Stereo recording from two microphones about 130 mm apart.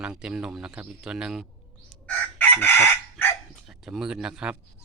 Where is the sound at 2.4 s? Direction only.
15° left (ahead or behind).